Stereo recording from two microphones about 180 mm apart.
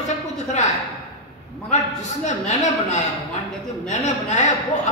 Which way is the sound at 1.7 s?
40° left (ahead or behind).